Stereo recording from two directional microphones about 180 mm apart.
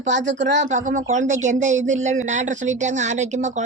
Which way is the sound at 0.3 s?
85° right.